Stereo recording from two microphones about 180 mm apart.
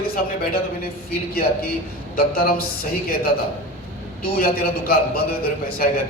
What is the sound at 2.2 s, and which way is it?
Speech, 55° left (ahead or behind).